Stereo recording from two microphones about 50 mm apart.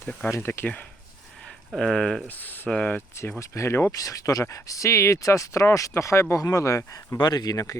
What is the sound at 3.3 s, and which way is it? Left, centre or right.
Speech, left.